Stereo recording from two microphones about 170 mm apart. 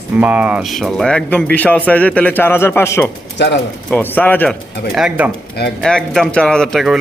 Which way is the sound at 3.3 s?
90° left.